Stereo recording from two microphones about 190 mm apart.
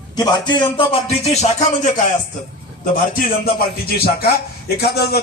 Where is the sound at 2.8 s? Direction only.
50° left (ahead or behind).